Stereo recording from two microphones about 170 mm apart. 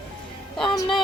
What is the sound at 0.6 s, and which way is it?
Music, 25° left (ahead or behind).